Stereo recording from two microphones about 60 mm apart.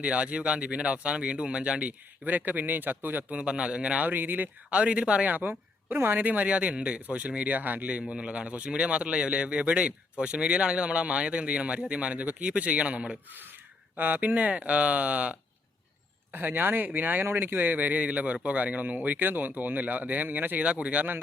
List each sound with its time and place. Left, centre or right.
0.0 s a man's voice: centre
4.0 s speech: right
4.8 s a man's voice: centre